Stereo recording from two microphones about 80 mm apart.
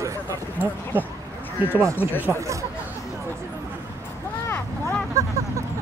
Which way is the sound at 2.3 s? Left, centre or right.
Right.